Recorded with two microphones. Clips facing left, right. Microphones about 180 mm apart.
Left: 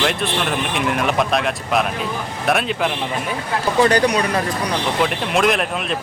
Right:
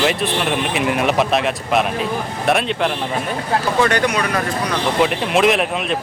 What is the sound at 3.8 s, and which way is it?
Speech, 35° left (ahead or behind).